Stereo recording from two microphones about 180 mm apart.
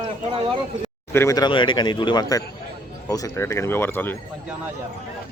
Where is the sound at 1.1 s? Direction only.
20° left (ahead or behind).